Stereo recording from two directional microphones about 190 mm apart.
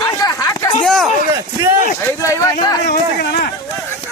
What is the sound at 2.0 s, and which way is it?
Speech, 10° left (ahead or behind).